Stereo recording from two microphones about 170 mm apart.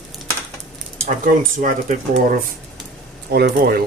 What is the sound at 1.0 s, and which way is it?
Speech, 50° right (ahead or behind).